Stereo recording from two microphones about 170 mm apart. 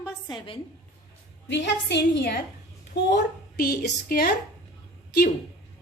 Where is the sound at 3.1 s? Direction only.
65° left (ahead or behind).